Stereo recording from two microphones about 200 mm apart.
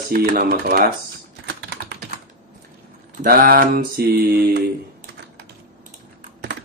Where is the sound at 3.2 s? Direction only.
45° right (ahead or behind).